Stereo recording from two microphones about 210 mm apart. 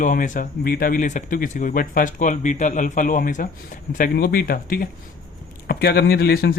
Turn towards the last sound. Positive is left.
turn(degrees=50)  # may be behind; listen again after turning